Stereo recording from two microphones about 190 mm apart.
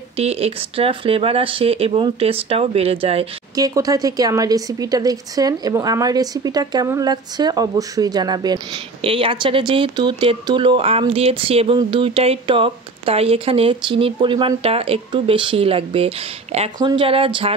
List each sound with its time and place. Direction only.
0.2 s speech: 30° right (ahead or behind)
3.5 s speech: 20° right (ahead or behind)